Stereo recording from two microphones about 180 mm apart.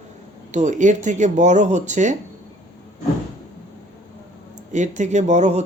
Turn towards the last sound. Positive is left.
turn(degrees=-40)  # may be behind; listen again after turning